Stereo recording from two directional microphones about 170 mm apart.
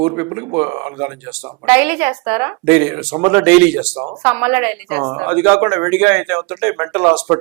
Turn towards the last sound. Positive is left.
turn(degrees=-10)  # may be behind; listen again after turning